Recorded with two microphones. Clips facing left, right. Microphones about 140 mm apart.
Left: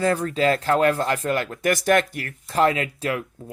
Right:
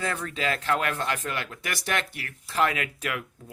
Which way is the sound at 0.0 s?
35° left (ahead or behind).